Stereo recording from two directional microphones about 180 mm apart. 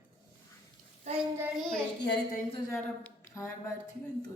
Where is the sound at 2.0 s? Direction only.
70° left (ahead or behind).